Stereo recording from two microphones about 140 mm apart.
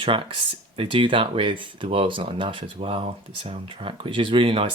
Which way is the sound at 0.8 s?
35° right (ahead or behind).